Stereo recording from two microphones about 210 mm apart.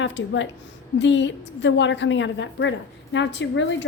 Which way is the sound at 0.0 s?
60° left (ahead or behind).